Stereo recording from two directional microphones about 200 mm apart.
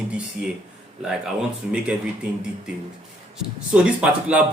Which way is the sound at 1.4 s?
5° right (ahead or behind).